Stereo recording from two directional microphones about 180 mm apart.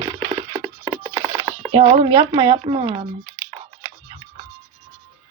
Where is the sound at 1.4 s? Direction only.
30° right (ahead or behind).